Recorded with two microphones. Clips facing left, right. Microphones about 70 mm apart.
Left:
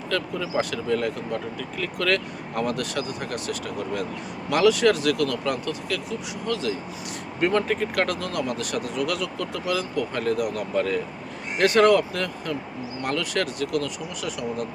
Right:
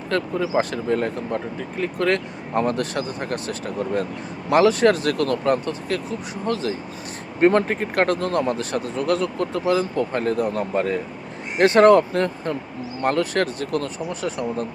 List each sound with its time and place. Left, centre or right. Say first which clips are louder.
0.1 s speech: right 5 dB; right